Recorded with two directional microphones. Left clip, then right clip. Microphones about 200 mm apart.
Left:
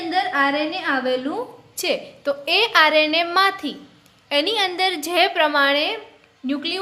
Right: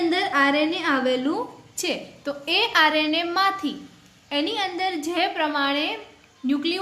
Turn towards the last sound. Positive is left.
turn(degrees=10)  # may be behind; listen again after turning